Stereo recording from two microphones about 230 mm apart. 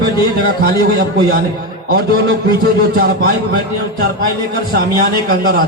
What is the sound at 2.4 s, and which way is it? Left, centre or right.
A man's voice, right.